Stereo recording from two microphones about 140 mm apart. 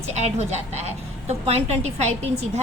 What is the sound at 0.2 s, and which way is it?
A woman's voice, 50° right (ahead or behind).